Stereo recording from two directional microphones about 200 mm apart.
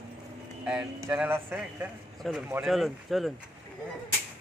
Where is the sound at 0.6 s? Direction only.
5° right (ahead or behind).